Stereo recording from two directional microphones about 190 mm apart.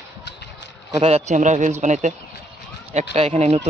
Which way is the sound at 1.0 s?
35° right (ahead or behind).